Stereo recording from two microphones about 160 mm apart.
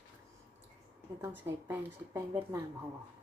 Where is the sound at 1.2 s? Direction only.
15° right (ahead or behind).